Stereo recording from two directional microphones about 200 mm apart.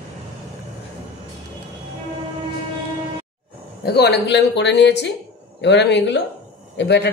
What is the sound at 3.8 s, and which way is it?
Speech, 55° left (ahead or behind).